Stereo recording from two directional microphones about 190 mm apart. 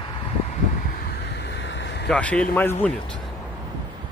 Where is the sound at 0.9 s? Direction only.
55° left (ahead or behind).